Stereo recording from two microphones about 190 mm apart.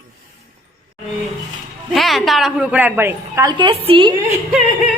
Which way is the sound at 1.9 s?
Centre (ahead or behind).